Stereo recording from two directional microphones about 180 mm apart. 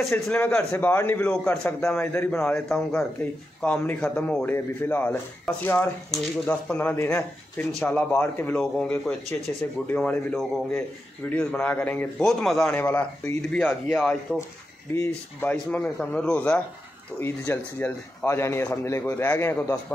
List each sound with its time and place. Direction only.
0.1 s speech: 15° left (ahead or behind)